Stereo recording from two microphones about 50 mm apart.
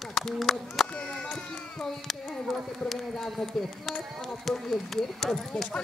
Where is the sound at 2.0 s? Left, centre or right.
Centre.